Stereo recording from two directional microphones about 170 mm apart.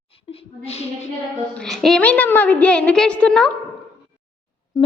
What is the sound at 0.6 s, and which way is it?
Speech, 40° left (ahead or behind).